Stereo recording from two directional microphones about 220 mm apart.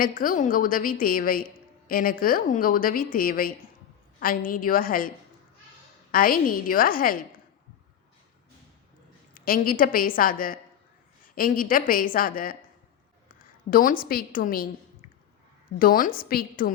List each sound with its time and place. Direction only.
0.0 s a woman's voice: 40° left (ahead or behind)
9.3 s a woman's voice: 40° left (ahead or behind)
15.8 s a woman's voice: 40° left (ahead or behind)